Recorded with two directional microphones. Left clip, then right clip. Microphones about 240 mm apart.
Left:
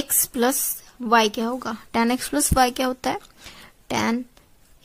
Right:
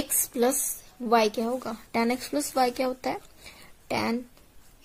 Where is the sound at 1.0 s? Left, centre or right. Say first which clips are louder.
Left 4 dB; left.